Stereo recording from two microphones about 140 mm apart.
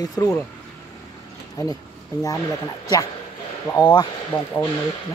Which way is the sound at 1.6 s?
25° left (ahead or behind).